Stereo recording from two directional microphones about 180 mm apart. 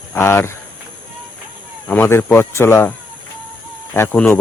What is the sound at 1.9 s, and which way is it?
Speech, 15° left (ahead or behind).